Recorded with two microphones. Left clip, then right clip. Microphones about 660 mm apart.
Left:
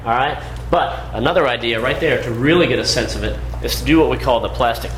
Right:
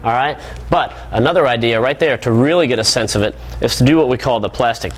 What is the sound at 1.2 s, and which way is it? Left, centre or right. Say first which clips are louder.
Speech: right 2 dB; right.